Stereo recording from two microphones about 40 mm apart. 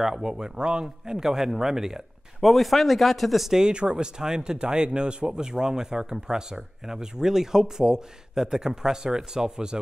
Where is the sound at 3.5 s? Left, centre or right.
Right.